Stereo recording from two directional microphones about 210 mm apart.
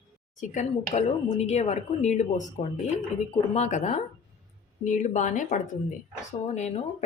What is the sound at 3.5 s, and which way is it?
A woman's voice, 35° left (ahead or behind).